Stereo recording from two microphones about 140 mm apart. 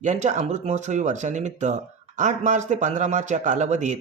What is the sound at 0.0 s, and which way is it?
Speech, 60° right (ahead or behind).